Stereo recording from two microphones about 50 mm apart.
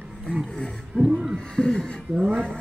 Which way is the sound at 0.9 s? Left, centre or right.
Centre.